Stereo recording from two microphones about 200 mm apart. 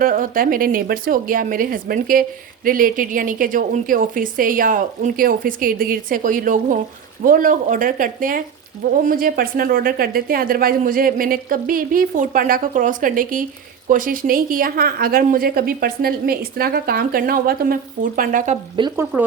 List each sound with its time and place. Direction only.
0.0 s speech: 45° right (ahead or behind)
18.8 s frying: 20° right (ahead or behind)